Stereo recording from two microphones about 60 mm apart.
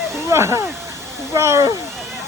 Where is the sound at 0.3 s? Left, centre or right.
Right.